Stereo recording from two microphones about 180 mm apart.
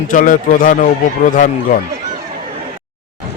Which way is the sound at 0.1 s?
50° left (ahead or behind).